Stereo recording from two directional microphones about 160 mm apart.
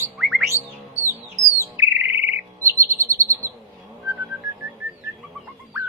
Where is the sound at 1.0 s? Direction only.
20° left (ahead or behind).